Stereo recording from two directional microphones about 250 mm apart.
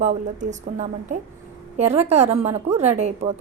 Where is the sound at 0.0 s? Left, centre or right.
Right.